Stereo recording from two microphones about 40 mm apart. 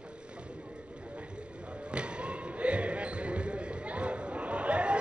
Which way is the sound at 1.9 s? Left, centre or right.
Right.